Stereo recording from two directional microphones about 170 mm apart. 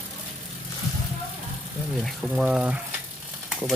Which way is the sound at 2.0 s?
5° right (ahead or behind).